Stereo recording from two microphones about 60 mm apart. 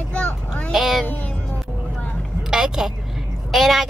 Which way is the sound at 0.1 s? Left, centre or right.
Left.